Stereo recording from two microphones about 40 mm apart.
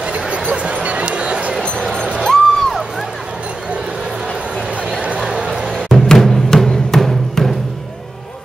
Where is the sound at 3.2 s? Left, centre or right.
Right.